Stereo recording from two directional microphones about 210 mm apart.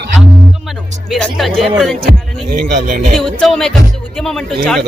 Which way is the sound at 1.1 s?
Centre (ahead or behind).